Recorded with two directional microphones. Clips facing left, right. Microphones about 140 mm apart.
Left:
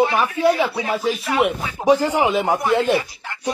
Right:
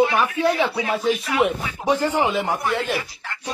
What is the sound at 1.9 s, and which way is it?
Speech, 15° left (ahead or behind).